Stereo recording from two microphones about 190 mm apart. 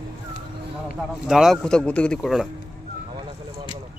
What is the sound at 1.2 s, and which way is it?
A man's voice, centre (ahead or behind).